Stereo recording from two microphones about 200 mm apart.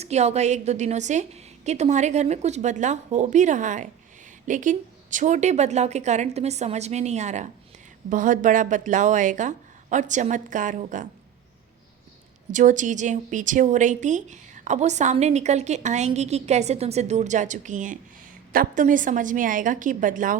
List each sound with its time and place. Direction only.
0.0 s a woman's voice: 35° right (ahead or behind)
12.5 s a woman's voice: 40° right (ahead or behind)